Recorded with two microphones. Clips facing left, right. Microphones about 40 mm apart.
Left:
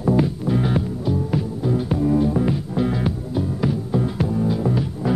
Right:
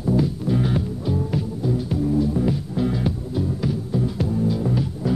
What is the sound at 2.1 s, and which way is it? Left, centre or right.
Music, left.